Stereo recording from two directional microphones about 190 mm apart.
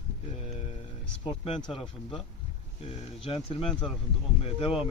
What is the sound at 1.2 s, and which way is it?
Speech, 25° left (ahead or behind).